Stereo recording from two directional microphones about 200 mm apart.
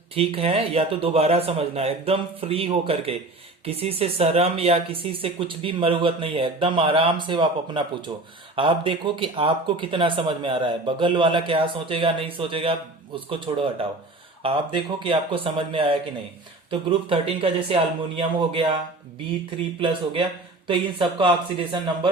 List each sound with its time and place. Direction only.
0.2 s speech: 30° right (ahead or behind)
20.7 s speech: 25° right (ahead or behind)